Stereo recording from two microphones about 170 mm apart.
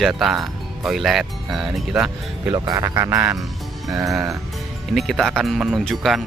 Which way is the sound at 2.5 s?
20° right (ahead or behind).